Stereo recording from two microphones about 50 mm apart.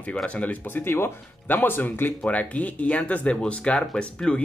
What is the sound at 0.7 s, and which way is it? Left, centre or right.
Speech, left.